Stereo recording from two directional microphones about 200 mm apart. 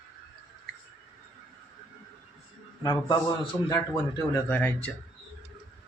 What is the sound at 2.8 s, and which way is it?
A man's voice, 20° left (ahead or behind).